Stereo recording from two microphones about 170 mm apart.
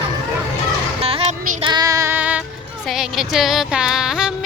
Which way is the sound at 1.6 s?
25° right (ahead or behind).